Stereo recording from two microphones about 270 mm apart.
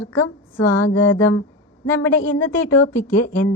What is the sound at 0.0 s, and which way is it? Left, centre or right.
A woman's voice, left.